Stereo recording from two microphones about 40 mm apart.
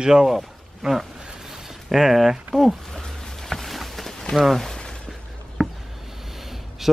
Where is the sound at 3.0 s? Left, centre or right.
Centre.